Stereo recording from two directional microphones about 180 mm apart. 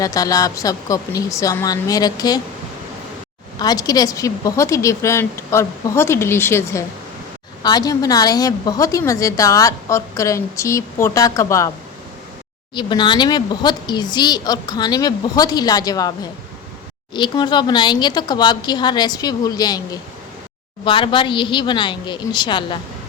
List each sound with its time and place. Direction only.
0.0 s speech: 20° left (ahead or behind)
3.6 s a woman's voice: 20° left (ahead or behind)
12.7 s speech: 25° left (ahead or behind)